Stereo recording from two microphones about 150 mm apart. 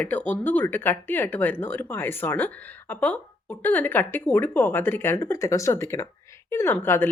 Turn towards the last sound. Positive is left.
turn(degrees=15)  # may be behind; listen again after turning